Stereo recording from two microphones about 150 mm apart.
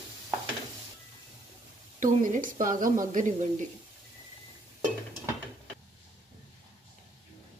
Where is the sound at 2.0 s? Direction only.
60° right (ahead or behind).